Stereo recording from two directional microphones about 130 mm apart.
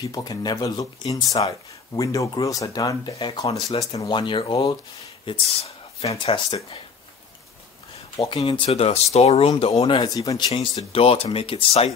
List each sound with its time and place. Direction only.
0.0 s speech: 30° left (ahead or behind)
3.2 s speech: 40° left (ahead or behind)
8.2 s speech: 50° left (ahead or behind)
9.9 s speech: 30° left (ahead or behind)
10.5 s speech: 50° left (ahead or behind)